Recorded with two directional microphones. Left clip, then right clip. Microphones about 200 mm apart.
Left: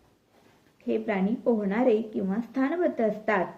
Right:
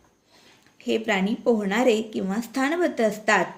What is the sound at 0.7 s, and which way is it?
A woman's voice, 45° right (ahead or behind).